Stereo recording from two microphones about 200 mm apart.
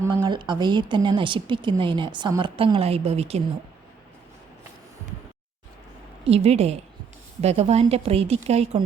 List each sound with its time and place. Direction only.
0.0 s a woman's voice: 15° right (ahead or behind)
6.2 s speech: 30° right (ahead or behind)